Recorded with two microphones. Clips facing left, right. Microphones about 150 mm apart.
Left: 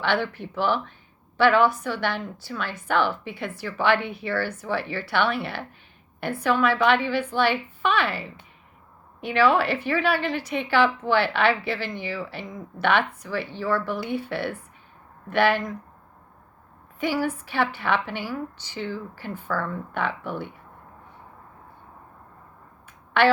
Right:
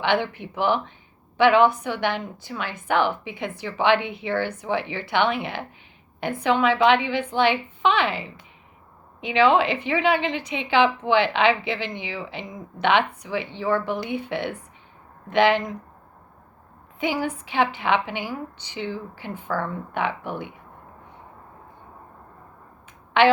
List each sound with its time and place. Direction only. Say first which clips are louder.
0.0 s a woman's voice: right 2 dB; 15° right (ahead or behind)
17.0 s a woman's voice: even; 15° right (ahead or behind)